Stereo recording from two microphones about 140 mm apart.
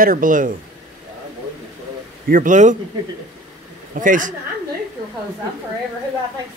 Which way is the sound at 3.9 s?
70° right (ahead or behind).